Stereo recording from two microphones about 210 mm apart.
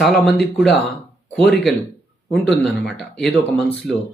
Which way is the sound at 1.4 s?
Centre (ahead or behind).